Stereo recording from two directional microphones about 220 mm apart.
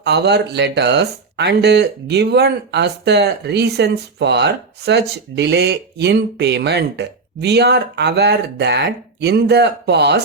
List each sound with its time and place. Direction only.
0.0 s speech: 50° right (ahead or behind)